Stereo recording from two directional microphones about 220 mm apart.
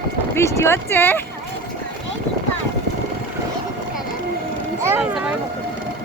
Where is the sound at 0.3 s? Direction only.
10° left (ahead or behind).